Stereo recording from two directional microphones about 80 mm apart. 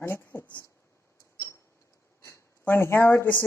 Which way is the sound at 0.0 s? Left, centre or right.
Left.